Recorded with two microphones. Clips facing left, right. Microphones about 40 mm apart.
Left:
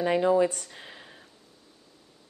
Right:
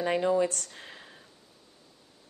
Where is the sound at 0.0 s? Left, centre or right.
Centre.